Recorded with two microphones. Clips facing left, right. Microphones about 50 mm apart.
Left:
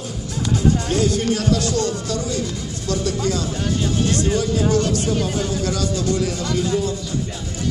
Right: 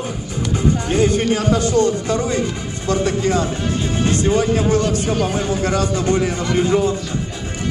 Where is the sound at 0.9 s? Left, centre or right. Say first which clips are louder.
Right 3 dB; right.